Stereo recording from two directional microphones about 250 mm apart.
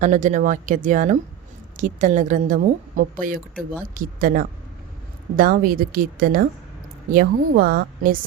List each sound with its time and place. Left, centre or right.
0.0 s a woman's voice: right